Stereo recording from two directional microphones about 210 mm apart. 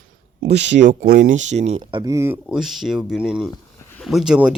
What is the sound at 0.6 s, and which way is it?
Speech, 60° right (ahead or behind).